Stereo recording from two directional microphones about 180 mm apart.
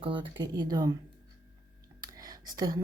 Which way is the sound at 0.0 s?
30° right (ahead or behind).